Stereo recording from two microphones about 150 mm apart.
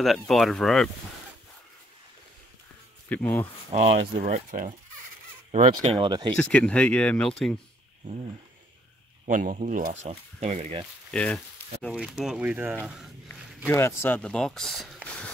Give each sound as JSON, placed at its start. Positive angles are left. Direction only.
{"t": 0.0, "sound": "speech", "side_deg": 0}
{"t": 3.1, "sound": "speech", "side_deg": 10}
{"t": 3.7, "sound": "speech", "side_deg": -45}
{"t": 4.3, "sound": "speech", "side_deg": -60}
{"t": 5.7, "sound": "speech", "side_deg": -35}
{"t": 6.3, "sound": "speech", "side_deg": 10}
{"t": 9.2, "sound": "speech", "side_deg": -65}
{"t": 11.1, "sound": "speech", "side_deg": 5}
{"t": 11.9, "sound": "speech", "side_deg": -5}
{"t": 13.7, "sound": "speech", "side_deg": 15}